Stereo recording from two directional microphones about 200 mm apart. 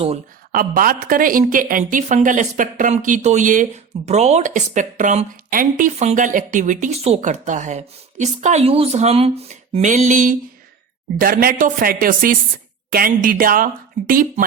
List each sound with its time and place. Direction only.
0.5 s a woman's voice: 45° right (ahead or behind)